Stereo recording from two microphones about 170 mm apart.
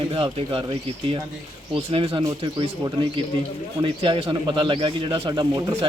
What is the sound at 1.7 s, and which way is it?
Speech, 30° right (ahead or behind).